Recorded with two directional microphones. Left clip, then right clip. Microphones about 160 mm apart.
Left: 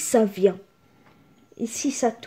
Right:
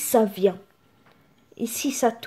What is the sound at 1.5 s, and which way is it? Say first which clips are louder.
Speech: even; centre (ahead or behind).